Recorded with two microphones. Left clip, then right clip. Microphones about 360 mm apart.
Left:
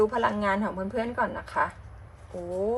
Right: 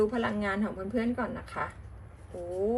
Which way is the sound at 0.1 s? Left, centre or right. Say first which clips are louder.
Left 6 dB; centre.